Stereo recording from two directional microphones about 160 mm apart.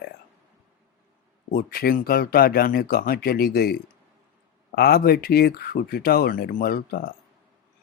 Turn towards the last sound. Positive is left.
turn(degrees=70)  # may be behind; listen again after turning